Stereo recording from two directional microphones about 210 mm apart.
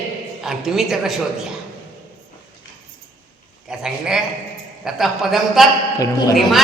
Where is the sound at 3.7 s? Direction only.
5° right (ahead or behind).